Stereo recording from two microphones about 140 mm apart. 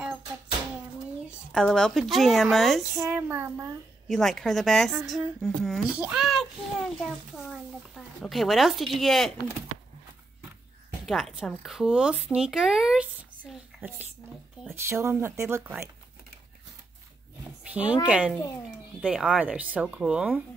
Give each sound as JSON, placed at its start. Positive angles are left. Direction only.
{"t": 1.5, "sound": "speech", "side_deg": 5}
{"t": 3.1, "sound": "speech", "side_deg": -15}
{"t": 4.1, "sound": "speech", "side_deg": 5}
{"t": 11.1, "sound": "speech", "side_deg": 0}
{"t": 14.9, "sound": "speech", "side_deg": -20}
{"t": 17.6, "sound": "a woman's voice", "side_deg": -10}